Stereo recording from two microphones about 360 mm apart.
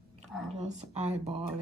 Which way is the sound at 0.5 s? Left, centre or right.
Centre.